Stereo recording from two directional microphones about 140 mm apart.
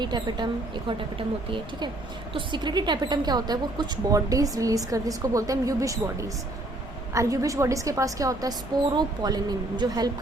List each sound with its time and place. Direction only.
0.0 s a woman's voice: 30° right (ahead or behind)
2.3 s a woman's voice: 35° right (ahead or behind)